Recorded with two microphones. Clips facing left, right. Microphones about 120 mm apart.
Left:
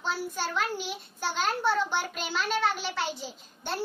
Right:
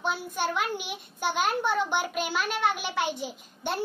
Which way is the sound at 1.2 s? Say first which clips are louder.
Right 1 dB; 15° right (ahead or behind).